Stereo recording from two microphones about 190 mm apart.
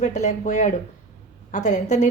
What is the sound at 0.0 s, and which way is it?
A woman's voice, 40° left (ahead or behind).